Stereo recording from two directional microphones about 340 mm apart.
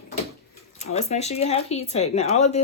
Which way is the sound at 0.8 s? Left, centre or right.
Centre.